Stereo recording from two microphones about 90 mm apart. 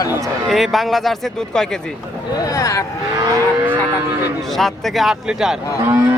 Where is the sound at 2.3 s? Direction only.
40° left (ahead or behind).